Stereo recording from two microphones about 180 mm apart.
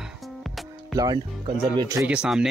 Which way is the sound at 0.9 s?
20° right (ahead or behind).